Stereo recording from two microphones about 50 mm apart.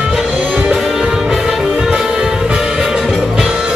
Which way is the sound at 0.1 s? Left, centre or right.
Centre.